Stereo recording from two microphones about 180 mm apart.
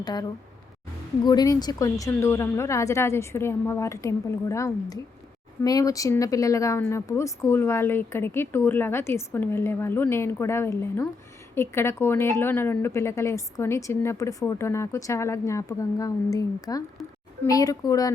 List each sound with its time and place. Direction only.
0.0 s a child's voice: 20° left (ahead or behind)